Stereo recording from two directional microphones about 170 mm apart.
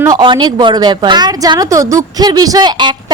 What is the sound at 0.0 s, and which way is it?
A woman's voice, 25° right (ahead or behind).